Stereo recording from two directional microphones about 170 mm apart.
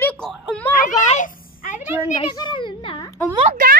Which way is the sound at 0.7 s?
50° left (ahead or behind).